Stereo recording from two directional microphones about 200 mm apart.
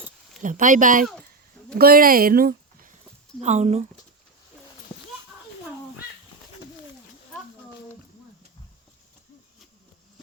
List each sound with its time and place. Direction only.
0.4 s speech: 40° right (ahead or behind)
3.4 s speech: 35° right (ahead or behind)